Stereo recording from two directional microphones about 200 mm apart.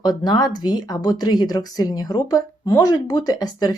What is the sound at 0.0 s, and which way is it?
Speech, 20° left (ahead or behind).